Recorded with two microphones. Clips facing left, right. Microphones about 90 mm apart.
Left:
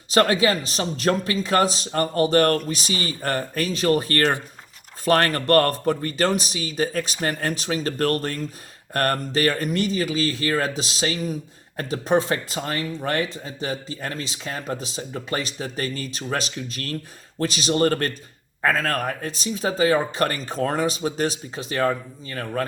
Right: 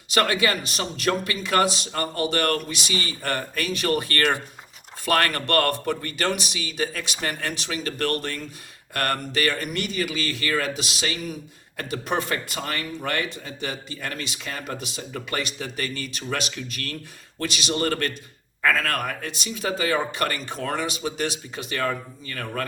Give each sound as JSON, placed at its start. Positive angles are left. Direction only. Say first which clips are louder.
{"t": 0.1, "sound": "speech", "louder": "left 4 dB", "side_deg": 35}